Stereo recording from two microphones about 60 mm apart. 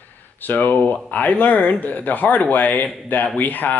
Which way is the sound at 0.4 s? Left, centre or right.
Left.